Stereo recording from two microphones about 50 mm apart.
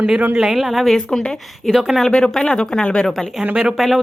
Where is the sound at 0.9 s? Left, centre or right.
Centre.